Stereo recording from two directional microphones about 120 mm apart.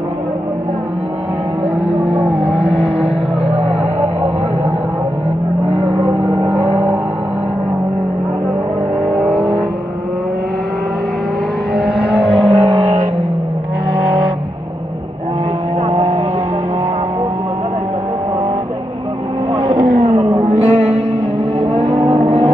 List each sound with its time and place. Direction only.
1.9 s vehicle: 55° right (ahead or behind)
5.7 s vehicle: 60° right (ahead or behind)
6.4 s vehicle: 20° right (ahead or behind)
12.2 s vehicle: 55° right (ahead or behind)
20.3 s a sound: 60° right (ahead or behind)
21.5 s vehicle: 55° right (ahead or behind)